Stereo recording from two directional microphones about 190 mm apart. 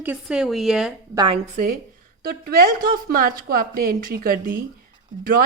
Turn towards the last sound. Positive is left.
turn(degrees=-50)  # may be behind; listen again after turning